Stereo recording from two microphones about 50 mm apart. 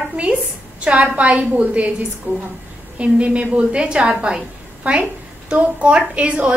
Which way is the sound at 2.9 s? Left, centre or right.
Right.